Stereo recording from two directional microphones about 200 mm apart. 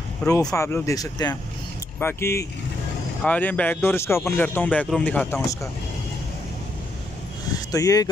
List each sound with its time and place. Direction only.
0.2 s speech: 15° left (ahead or behind)
7.7 s speech: 15° left (ahead or behind)